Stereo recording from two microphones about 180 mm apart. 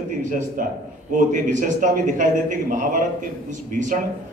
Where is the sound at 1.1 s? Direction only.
45° right (ahead or behind).